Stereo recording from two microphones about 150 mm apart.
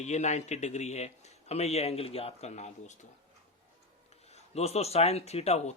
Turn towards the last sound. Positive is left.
turn(degrees=45)  # may be behind; listen again after turning